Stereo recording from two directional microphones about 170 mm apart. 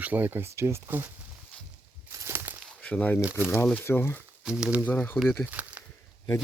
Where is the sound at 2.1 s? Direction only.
15° right (ahead or behind).